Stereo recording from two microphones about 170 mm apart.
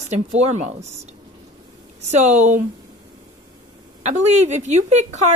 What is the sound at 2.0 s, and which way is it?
Speech, 40° right (ahead or behind).